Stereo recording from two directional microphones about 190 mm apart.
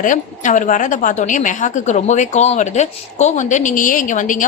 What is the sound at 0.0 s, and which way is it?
A woman's voice, 45° left (ahead or behind).